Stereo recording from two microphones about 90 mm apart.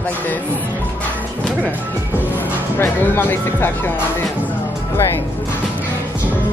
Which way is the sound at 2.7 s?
25° left (ahead or behind).